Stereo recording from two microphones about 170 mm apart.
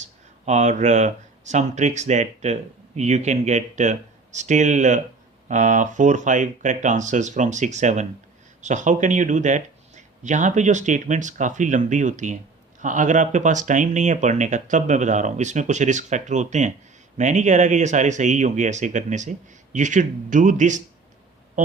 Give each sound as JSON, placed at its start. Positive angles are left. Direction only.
{"t": 0.0, "sound": "speech", "side_deg": -45}